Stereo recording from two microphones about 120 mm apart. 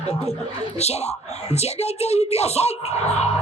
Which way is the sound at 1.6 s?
60° left (ahead or behind).